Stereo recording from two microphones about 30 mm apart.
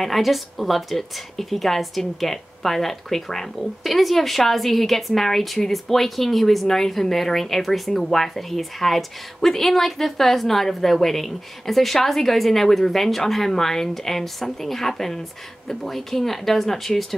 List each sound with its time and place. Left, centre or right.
0.0 s a woman's voice: centre